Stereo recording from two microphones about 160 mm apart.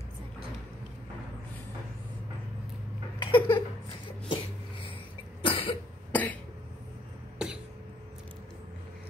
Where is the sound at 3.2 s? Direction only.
30° left (ahead or behind).